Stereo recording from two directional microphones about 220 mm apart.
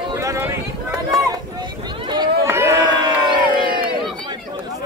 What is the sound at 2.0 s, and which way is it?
Crowd, 20° right (ahead or behind).